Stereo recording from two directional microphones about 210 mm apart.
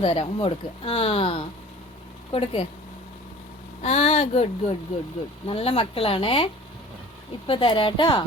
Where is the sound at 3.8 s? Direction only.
30° left (ahead or behind).